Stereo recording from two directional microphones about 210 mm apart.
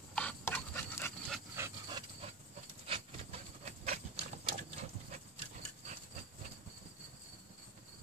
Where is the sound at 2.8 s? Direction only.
30° right (ahead or behind).